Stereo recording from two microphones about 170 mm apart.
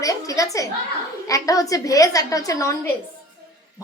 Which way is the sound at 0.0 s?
20° left (ahead or behind).